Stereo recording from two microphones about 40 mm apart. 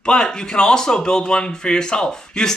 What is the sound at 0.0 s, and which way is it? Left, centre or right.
Speech, left.